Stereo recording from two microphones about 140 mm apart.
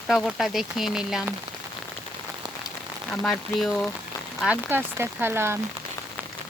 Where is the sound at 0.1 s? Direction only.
Centre (ahead or behind).